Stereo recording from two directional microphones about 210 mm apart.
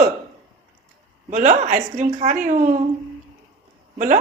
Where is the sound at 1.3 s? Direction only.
35° right (ahead or behind).